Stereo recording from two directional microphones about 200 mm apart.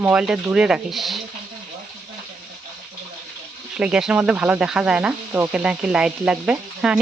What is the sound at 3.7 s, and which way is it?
Speech, 5° right (ahead or behind).